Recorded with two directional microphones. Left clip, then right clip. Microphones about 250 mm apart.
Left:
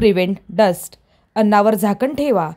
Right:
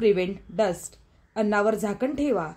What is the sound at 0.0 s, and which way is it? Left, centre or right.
A woman's voice, left.